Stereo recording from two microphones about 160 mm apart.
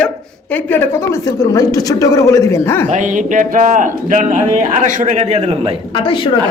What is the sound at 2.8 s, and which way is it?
Speech, 50° right (ahead or behind).